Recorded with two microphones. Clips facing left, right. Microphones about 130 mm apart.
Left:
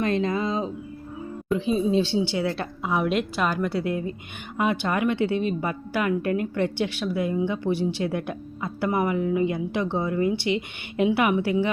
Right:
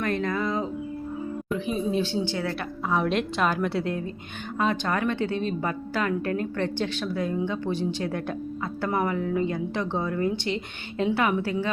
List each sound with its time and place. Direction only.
0.0 s speech: 20° left (ahead or behind)